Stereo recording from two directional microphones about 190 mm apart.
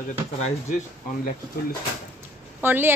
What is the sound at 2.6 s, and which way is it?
Speech, 10° right (ahead or behind).